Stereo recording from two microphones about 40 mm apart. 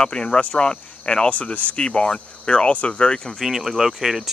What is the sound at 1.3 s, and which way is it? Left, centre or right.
Speech, left.